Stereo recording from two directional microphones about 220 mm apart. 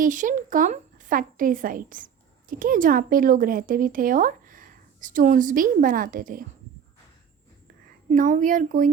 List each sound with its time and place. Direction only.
0.0 s a woman's voice: 35° right (ahead or behind)
8.1 s a woman's voice: 35° right (ahead or behind)